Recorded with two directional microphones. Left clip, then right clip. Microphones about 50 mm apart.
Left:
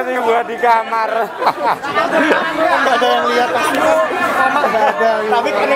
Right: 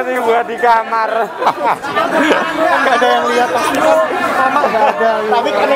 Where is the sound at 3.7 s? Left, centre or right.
Left.